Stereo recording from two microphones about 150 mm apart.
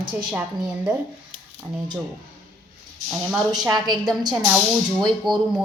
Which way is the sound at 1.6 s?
30° right (ahead or behind).